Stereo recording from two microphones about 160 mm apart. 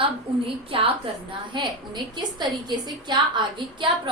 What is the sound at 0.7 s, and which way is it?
A woman's voice, 35° right (ahead or behind).